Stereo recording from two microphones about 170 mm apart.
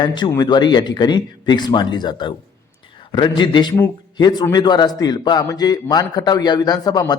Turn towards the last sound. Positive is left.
turn(degrees=25)  # may be behind; listen again after turning